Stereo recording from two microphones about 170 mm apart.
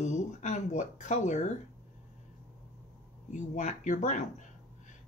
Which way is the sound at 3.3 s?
45° left (ahead or behind).